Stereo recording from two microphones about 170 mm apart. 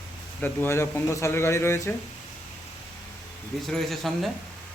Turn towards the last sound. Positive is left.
turn(degrees=0)  # may be behind; listen again after turning